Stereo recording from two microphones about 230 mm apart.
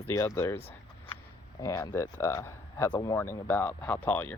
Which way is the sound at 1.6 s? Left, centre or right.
Centre.